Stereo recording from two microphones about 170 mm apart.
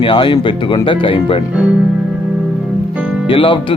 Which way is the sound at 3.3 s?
30° left (ahead or behind).